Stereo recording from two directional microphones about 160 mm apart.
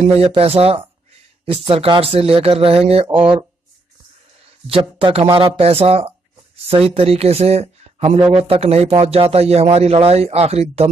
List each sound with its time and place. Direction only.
0.3 s speech: 35° right (ahead or behind)
4.6 s speech: 35° right (ahead or behind)